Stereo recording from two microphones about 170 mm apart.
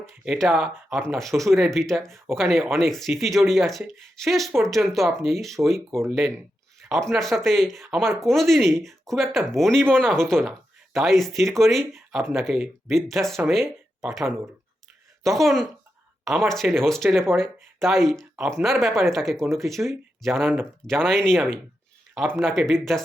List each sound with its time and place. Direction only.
0.3 s speech: centre (ahead or behind)
13.5 s a sound: centre (ahead or behind)
15.2 s speech: centre (ahead or behind)
20.4 s speech: 10° right (ahead or behind)
20.8 s speech: 5° left (ahead or behind)